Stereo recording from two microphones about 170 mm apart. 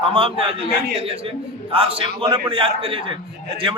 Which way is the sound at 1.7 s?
35° right (ahead or behind).